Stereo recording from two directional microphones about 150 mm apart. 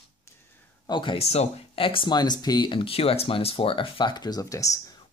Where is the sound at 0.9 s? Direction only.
35° left (ahead or behind).